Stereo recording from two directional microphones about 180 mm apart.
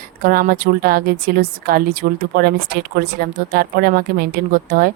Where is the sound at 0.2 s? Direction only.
55° right (ahead or behind).